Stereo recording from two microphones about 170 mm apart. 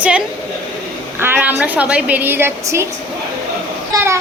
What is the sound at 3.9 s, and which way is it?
Child singing, 20° right (ahead or behind).